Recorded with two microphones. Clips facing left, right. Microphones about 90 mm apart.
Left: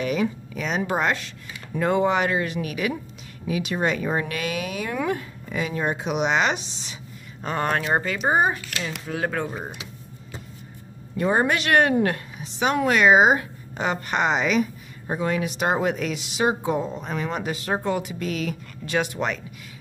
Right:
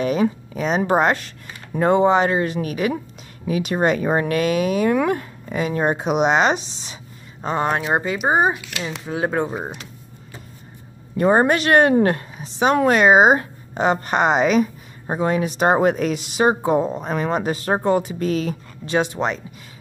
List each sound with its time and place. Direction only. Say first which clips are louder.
0.0 s a woman's voice: right 5 dB; 35° right (ahead or behind)
7.4 s speech: right 3 dB; 20° right (ahead or behind)
11.1 s a woman's voice: right 6 dB; 45° right (ahead or behind); by 19.4 s 25° right (ahead or behind)